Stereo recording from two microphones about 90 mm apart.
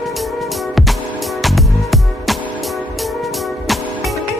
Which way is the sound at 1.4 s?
Centre (ahead or behind).